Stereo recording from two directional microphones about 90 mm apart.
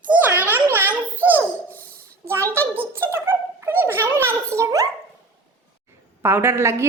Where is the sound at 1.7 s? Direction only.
20° left (ahead or behind).